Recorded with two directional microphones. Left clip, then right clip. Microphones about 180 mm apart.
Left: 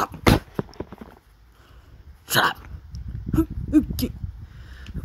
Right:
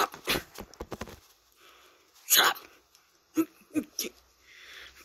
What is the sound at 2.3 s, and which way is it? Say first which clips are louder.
Dog: left 3 dB; 40° left (ahead or behind).